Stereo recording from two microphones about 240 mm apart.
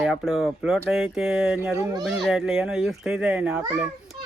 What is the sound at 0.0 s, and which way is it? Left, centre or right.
Speech, centre.